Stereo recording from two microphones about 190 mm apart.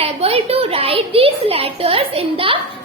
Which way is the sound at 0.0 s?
30° right (ahead or behind).